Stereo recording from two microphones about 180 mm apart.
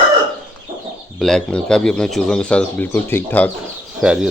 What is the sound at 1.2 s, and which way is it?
Speech, 5° left (ahead or behind).